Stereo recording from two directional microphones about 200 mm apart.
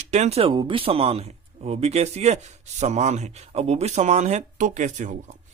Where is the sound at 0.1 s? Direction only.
35° right (ahead or behind).